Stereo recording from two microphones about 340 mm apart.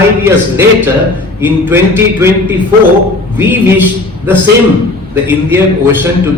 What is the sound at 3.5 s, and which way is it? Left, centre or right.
Speech, centre.